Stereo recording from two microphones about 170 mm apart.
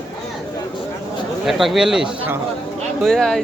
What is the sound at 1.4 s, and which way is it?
Speech, centre (ahead or behind).